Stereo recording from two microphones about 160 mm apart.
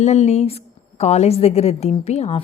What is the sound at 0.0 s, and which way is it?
A woman's voice, 45° left (ahead or behind).